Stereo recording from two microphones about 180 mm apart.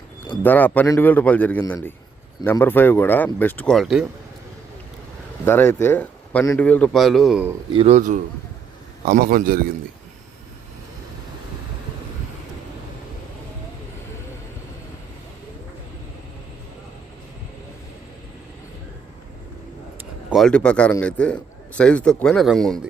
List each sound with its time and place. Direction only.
0.4 s a man's voice: 10° left (ahead or behind)
5.5 s a man's voice: 15° left (ahead or behind)
7.7 s a man's voice: 35° right (ahead or behind); by 9.6 s 55° right (ahead or behind)
20.0 s a man's voice: centre (ahead or behind)